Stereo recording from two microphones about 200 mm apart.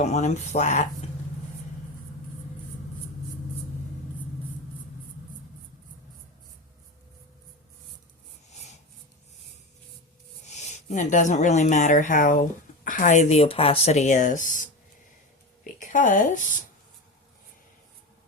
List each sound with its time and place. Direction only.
0.0 s speech: 35° left (ahead or behind)
8.4 s a sound: 35° left (ahead or behind)
10.4 s a woman's voice: 35° left (ahead or behind)